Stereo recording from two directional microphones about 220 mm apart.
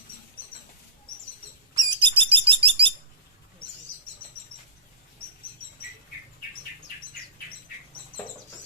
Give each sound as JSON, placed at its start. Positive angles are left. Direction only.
{"t": 1.7, "sound": "bird", "side_deg": -20}